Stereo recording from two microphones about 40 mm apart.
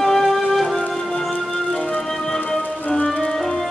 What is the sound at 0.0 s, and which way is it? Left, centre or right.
Music, centre.